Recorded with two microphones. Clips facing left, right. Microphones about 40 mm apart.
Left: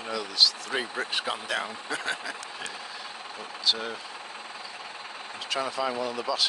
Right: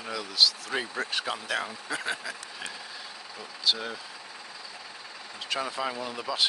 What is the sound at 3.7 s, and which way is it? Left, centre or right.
Speech, centre.